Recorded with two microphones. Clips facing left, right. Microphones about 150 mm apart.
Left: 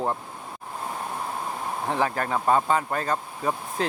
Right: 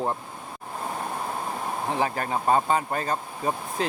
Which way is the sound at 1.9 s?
15° right (ahead or behind).